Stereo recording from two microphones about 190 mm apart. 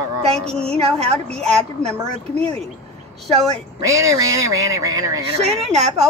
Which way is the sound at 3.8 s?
15° right (ahead or behind).